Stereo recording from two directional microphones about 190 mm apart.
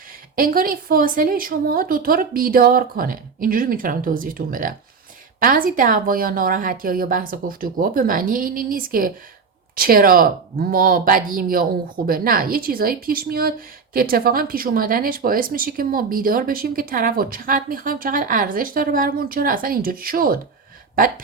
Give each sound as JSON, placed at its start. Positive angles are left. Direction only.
{"t": 0.3, "sound": "speech", "side_deg": -50}